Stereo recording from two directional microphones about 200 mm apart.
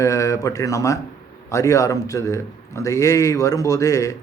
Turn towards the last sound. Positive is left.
turn(degrees=15)  # may be behind; listen again after turning